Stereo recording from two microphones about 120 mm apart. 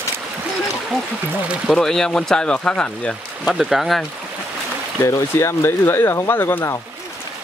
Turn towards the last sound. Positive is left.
turn(degrees=20)  # may be behind; listen again after turning